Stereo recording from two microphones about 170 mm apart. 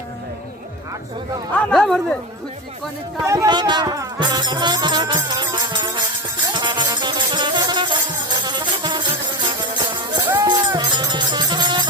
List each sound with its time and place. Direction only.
1.5 s speech: centre (ahead or behind)
3.2 s speech: 20° right (ahead or behind)
6.5 s music: 25° right (ahead or behind)